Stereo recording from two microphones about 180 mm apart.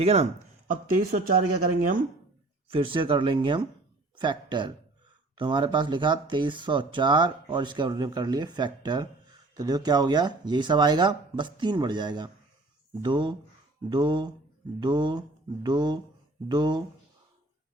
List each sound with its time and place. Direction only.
0.0 s speech: 35° right (ahead or behind)
0.7 s speech: 50° right (ahead or behind)
2.6 s speech: 30° right (ahead or behind)